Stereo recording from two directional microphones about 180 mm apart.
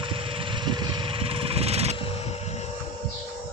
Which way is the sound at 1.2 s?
30° right (ahead or behind).